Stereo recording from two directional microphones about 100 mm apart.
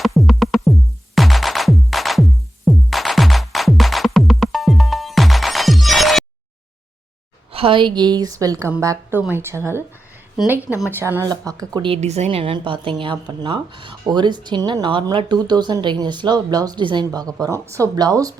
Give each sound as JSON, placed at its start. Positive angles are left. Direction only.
{"t": 0.0, "sound": "music", "side_deg": 0}
{"t": 7.5, "sound": "a woman's voice", "side_deg": -65}
{"t": 10.9, "sound": "a woman's voice", "side_deg": -25}
{"t": 11.3, "sound": "speech", "side_deg": -40}
{"t": 11.8, "sound": "speech", "side_deg": -80}
{"t": 12.5, "sound": "speech", "side_deg": -60}